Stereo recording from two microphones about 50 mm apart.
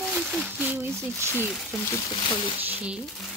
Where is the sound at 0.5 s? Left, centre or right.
Right.